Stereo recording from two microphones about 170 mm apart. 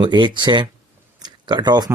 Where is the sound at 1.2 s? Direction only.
25° right (ahead or behind).